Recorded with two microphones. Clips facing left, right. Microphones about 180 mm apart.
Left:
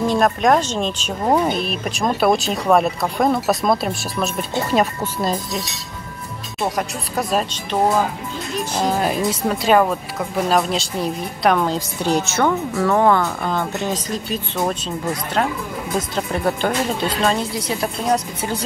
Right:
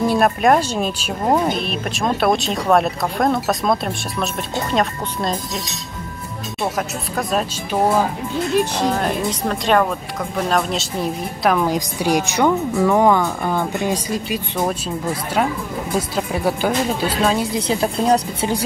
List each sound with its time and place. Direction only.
0.0 s speech: 5° right (ahead or behind)
6.6 s speech: centre (ahead or behind)
11.7 s a woman's voice: 15° right (ahead or behind)
16.2 s speech: 5° right (ahead or behind)
17.6 s speech: 30° right (ahead or behind)